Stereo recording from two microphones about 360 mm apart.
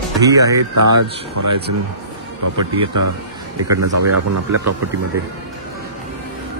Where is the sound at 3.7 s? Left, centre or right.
Right.